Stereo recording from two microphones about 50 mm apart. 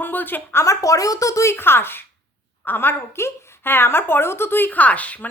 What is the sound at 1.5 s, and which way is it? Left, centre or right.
Speech, left.